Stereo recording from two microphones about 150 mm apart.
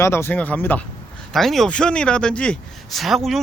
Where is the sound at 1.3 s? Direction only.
Centre (ahead or behind).